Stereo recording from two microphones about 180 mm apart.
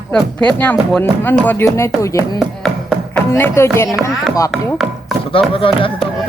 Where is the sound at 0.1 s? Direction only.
5° left (ahead or behind).